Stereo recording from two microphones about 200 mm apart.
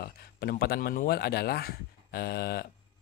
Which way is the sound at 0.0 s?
50° left (ahead or behind).